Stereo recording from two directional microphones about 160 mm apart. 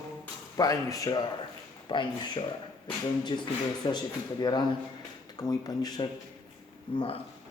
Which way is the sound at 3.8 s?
25° left (ahead or behind).